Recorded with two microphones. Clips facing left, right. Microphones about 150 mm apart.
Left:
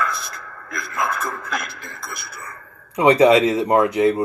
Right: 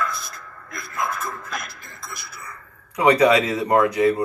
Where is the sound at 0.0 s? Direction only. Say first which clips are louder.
Left 2 dB; 90° left; by 2.6 s 50° left (ahead or behind).